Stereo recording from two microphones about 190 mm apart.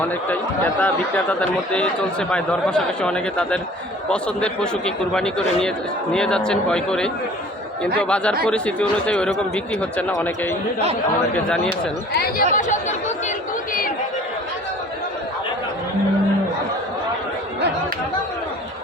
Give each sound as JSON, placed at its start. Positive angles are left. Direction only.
{"t": 0.3, "sound": "speech", "side_deg": 10}
{"t": 12.1, "sound": "speech", "side_deg": 55}
{"t": 12.5, "sound": "speech", "side_deg": 40}